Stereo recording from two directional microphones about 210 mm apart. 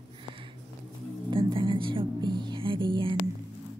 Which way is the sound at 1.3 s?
25° right (ahead or behind).